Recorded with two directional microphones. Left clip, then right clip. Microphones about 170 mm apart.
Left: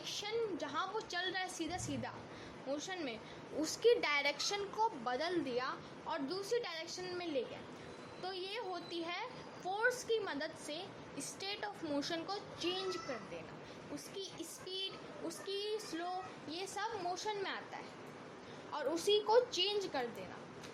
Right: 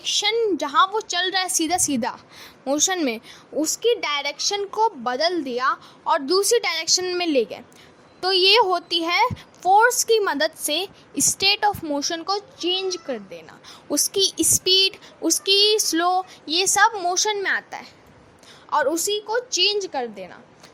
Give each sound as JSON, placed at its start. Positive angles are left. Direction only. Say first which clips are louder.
{"t": 0.0, "sound": "a woman's voice", "louder": "right 19 dB", "side_deg": -45}
{"t": 3.6, "sound": "a woman's voice", "louder": "right 11 dB", "side_deg": -30}
{"t": 18.9, "sound": "a woman's voice", "louder": "right 8 dB", "side_deg": -25}
{"t": 19.5, "sound": "a woman's voice", "louder": "right 15 dB", "side_deg": -35}